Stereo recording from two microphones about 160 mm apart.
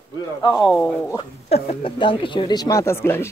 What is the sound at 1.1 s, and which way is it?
Speech, 35° left (ahead or behind).